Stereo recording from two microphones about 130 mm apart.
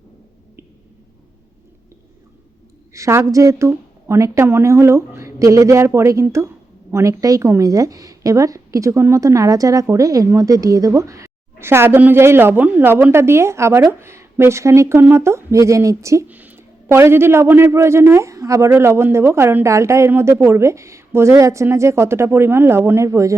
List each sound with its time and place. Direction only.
2.9 s a man's voice: 20° right (ahead or behind)